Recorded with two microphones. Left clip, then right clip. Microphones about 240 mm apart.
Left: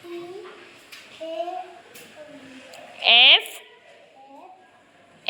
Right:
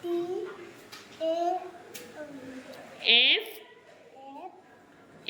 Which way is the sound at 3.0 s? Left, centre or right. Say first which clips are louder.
Left 8 dB; centre.